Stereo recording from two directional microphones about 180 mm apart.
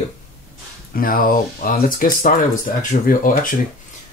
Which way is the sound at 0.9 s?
50° left (ahead or behind).